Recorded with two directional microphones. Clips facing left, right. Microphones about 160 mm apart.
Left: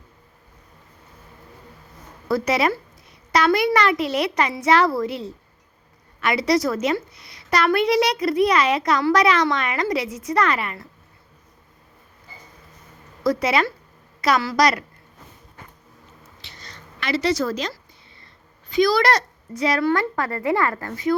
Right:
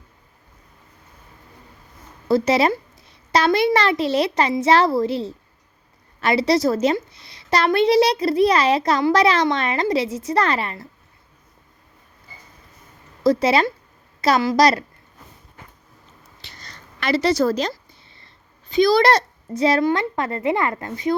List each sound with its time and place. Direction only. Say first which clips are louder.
2.2 s a woman's voice: right 3 dB; 25° right (ahead or behind)
13.2 s a woman's voice: right 3 dB; 25° right (ahead or behind)
16.4 s a sound: right 1 dB; 40° right (ahead or behind)
18.7 s a woman's voice: right 3 dB; 25° right (ahead or behind)